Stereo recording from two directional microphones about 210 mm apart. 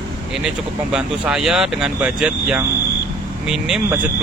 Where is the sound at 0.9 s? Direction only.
5° right (ahead or behind).